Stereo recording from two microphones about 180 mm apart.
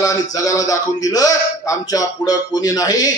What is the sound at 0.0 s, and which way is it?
Speech, 20° left (ahead or behind).